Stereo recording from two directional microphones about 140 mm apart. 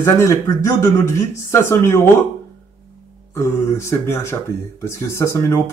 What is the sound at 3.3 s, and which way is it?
Speech, 20° left (ahead or behind).